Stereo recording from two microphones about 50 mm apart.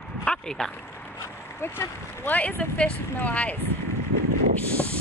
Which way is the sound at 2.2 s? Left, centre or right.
Left.